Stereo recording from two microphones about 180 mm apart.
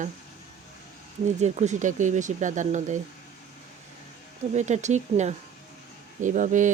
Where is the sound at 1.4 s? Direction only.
40° right (ahead or behind).